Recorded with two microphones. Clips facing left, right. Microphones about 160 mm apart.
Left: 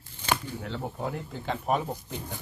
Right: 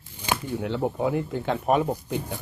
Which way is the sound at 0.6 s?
65° right (ahead or behind).